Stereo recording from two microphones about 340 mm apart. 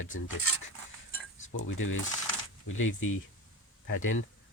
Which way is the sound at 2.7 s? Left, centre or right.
Left.